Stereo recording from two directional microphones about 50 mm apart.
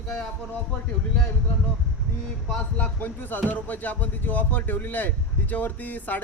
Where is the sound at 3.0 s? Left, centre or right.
Left.